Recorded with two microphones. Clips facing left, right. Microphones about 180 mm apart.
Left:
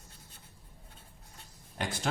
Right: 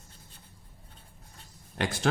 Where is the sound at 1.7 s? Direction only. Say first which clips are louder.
Right 6 dB; 75° right (ahead or behind).